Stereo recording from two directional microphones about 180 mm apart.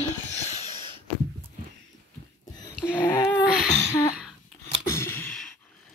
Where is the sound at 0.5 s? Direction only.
25° right (ahead or behind).